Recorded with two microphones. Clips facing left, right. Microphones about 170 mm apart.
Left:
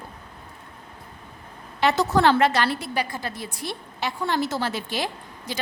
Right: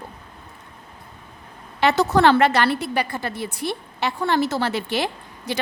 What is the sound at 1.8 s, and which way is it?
A woman's voice, 65° right (ahead or behind).